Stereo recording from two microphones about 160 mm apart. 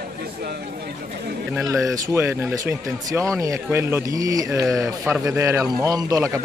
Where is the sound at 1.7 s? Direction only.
20° right (ahead or behind).